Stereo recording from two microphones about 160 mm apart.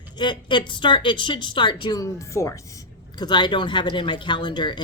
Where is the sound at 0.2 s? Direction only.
30° left (ahead or behind).